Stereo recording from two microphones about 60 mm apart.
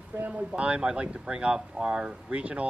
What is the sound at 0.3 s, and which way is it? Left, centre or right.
Speech, centre.